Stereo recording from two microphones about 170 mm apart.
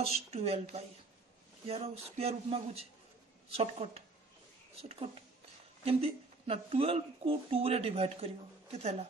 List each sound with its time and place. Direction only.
0.0 s speech: 35° right (ahead or behind)
5.9 s speech: 35° right (ahead or behind)